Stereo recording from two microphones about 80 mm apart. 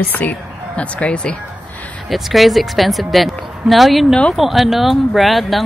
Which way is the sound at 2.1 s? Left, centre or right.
Centre.